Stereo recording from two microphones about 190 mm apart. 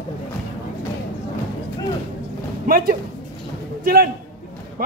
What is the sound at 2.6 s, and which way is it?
Speech, 50° right (ahead or behind).